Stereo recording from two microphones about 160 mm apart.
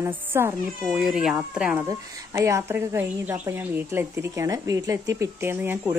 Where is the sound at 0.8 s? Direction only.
5° right (ahead or behind).